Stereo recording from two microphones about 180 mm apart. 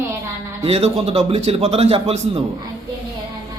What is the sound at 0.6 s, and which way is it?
A man's voice, 35° right (ahead or behind).